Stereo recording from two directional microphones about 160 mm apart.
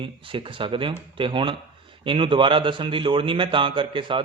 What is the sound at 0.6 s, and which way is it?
A man's voice, 30° right (ahead or behind).